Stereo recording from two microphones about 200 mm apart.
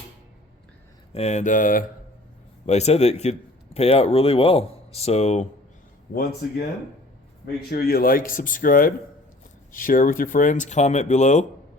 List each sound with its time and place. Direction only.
1.1 s speech: 35° left (ahead or behind)
7.4 s speech: 50° left (ahead or behind)